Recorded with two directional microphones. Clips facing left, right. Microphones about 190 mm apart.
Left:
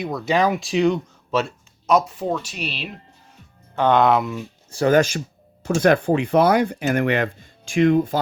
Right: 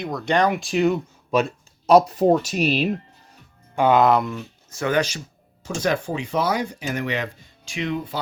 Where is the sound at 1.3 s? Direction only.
15° right (ahead or behind).